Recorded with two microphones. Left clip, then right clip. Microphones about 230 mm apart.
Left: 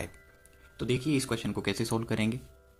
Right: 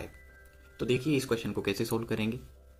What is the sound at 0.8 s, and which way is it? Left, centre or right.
Speech, left.